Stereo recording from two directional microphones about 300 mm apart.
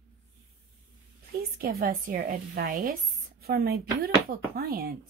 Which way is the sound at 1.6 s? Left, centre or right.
Right.